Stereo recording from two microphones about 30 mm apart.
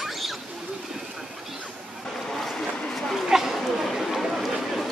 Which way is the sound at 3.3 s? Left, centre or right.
Centre.